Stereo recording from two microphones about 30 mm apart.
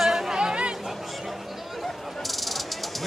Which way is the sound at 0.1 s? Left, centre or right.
Right.